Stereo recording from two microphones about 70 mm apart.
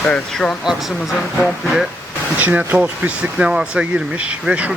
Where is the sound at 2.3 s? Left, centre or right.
Right.